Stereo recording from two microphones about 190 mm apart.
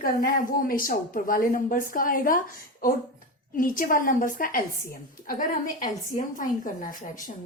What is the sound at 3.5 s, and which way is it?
A woman's voice, 45° left (ahead or behind).